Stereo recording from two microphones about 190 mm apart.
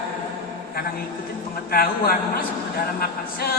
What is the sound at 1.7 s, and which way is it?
Speech, 50° left (ahead or behind).